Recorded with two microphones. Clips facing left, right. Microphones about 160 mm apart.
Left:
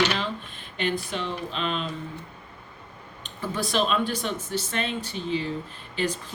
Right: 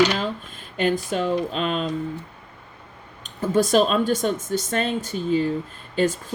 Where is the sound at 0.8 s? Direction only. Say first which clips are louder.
Right 6 dB; 45° right (ahead or behind).